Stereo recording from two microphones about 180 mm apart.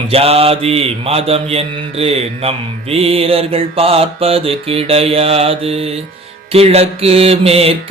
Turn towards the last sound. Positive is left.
turn(degrees=-35)  # may be behind; listen again after turning